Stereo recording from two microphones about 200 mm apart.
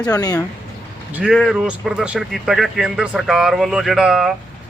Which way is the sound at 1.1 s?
5° right (ahead or behind).